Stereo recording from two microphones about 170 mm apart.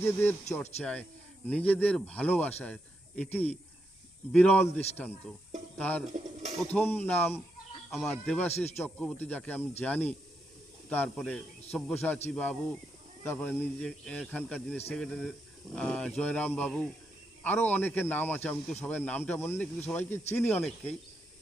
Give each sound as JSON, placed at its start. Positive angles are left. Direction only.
{"t": 0.0, "sound": "speech", "side_deg": 15}
{"t": 7.9, "sound": "speech", "side_deg": 0}
{"t": 8.4, "sound": "speech", "side_deg": 40}
{"t": 8.8, "sound": "speech", "side_deg": 10}